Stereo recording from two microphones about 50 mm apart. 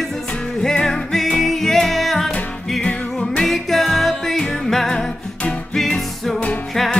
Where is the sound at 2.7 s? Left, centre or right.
Left.